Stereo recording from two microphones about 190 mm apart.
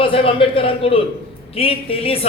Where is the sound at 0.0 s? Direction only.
30° left (ahead or behind).